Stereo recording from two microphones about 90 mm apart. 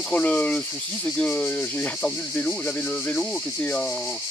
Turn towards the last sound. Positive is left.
turn(degrees=15)  # may be behind; listen again after turning